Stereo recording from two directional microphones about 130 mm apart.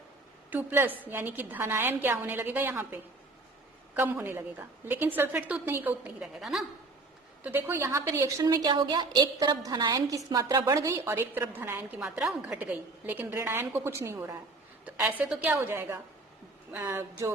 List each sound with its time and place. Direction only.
0.5 s a woman's voice: 15° right (ahead or behind)
6.4 s a woman's voice: centre (ahead or behind)
7.4 s a woman's voice: 15° right (ahead or behind)
11.9 s a woman's voice: 5° right (ahead or behind); by 17.3 s 20° right (ahead or behind)